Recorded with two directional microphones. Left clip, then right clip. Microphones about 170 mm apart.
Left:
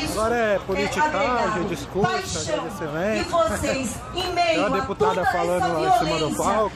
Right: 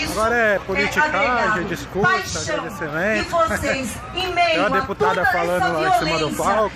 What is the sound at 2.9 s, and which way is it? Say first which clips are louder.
Speech: right 3 dB; centre (ahead or behind).